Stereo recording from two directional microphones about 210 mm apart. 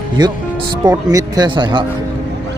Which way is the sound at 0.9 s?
20° right (ahead or behind).